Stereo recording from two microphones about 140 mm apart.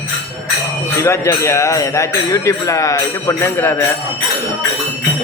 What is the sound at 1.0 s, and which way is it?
Speech, 20° left (ahead or behind).